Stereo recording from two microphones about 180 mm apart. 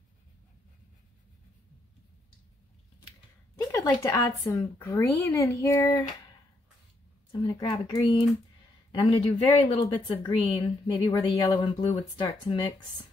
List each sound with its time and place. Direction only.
3.7 s speech: 15° left (ahead or behind)
7.4 s a woman's voice: 25° left (ahead or behind)